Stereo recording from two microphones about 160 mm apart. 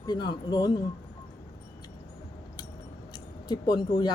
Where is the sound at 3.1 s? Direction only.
25° left (ahead or behind).